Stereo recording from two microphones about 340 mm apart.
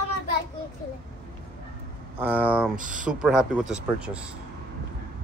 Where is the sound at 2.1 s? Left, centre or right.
Centre.